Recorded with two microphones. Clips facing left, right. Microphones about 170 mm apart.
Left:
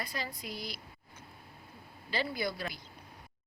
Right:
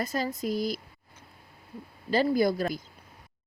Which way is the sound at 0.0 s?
45° right (ahead or behind).